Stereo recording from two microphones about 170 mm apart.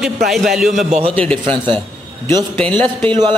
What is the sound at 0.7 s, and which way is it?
Speech, 40° right (ahead or behind).